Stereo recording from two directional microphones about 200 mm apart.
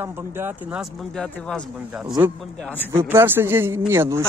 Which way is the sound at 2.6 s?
5° left (ahead or behind).